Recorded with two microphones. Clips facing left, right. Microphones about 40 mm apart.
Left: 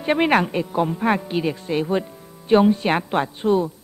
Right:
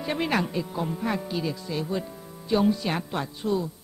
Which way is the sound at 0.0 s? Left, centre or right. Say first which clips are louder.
Left 8 dB; left.